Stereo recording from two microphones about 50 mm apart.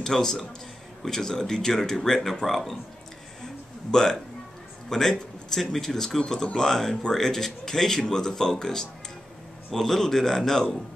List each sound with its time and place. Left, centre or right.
0.0 s speech: centre
3.9 s speech: centre